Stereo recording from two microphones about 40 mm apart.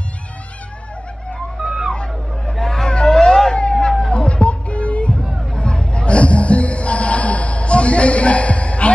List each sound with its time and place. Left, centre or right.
2.5 s hubbub: centre
2.9 s a sound: centre
4.1 s music: left